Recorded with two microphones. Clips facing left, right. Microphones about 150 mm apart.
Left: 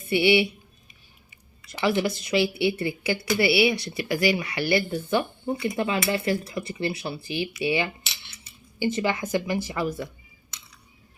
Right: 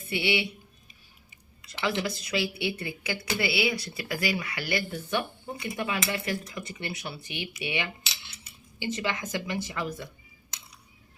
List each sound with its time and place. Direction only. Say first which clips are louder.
0.0 s speech: left 8 dB; 30° left (ahead or behind)
2.2 s a woman's voice: left 7 dB; 30° left (ahead or behind)